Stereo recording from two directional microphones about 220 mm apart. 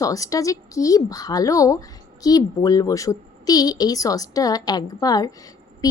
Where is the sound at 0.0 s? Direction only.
15° left (ahead or behind).